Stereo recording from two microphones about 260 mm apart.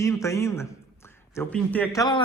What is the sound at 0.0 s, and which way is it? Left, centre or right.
A man's voice, centre.